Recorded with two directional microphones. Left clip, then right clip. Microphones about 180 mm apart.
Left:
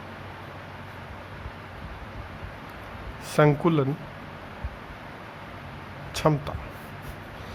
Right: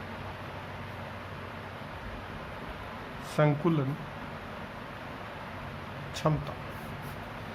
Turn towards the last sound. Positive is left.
turn(degrees=40)  # may be behind; listen again after turning